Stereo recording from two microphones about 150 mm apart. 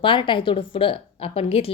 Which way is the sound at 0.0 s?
35° left (ahead or behind).